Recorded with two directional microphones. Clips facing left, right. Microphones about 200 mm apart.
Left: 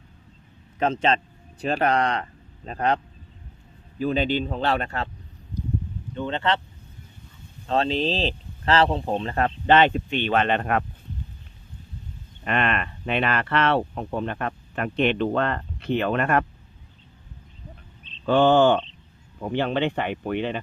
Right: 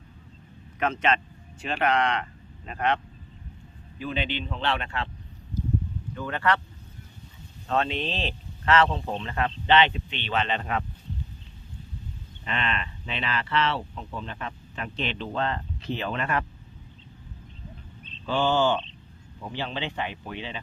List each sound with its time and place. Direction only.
0.8 s speech: 30° left (ahead or behind)
6.1 s speech: 25° left (ahead or behind)
7.7 s speech: 30° left (ahead or behind); by 10.8 s 55° left (ahead or behind)
12.5 s speech: 55° left (ahead or behind)
18.3 s speech: 55° left (ahead or behind)